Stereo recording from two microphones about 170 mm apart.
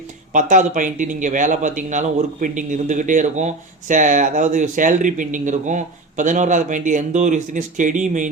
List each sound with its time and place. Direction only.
0.3 s speech: 50° right (ahead or behind)